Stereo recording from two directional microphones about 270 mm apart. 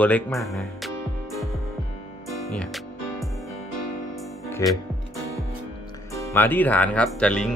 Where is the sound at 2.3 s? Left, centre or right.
Centre.